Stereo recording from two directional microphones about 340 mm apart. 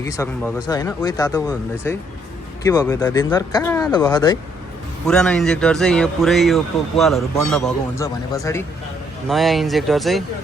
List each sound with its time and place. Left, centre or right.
0.0 s speech: centre
5.0 s speech: centre